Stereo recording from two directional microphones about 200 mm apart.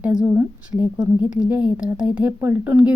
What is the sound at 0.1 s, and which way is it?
Speech, 20° right (ahead or behind).